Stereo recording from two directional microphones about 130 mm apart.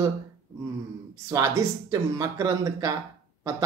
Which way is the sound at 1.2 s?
25° right (ahead or behind).